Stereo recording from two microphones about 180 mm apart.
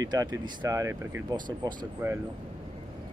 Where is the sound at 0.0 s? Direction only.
20° right (ahead or behind).